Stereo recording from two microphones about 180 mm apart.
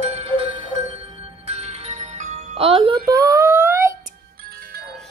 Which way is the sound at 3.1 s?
20° right (ahead or behind).